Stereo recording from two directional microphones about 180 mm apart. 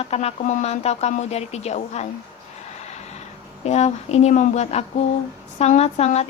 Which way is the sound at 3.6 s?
40° left (ahead or behind).